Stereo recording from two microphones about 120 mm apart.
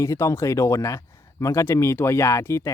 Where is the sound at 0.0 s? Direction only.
25° left (ahead or behind).